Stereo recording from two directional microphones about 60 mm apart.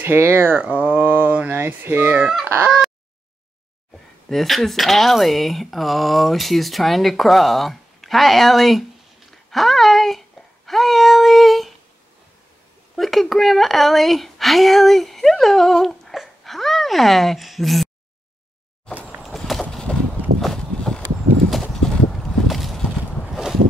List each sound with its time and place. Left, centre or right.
0.0 s speech: right
0.6 s speech: right
4.3 s speech: centre
9.3 s a sound: centre
12.9 s speech: centre
19.2 s a sound: centre
21.5 s horse: centre
22.5 s clip-clop: centre
23.3 s a sound: centre